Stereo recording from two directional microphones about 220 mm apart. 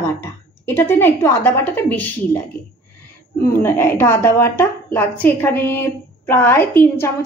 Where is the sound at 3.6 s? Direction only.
10° left (ahead or behind).